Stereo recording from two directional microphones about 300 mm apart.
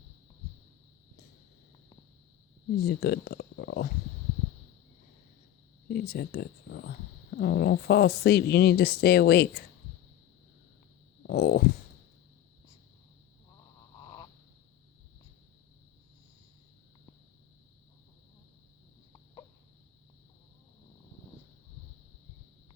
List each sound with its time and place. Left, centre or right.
2.7 s speech: left
5.9 s speech: left
11.2 s a sound: left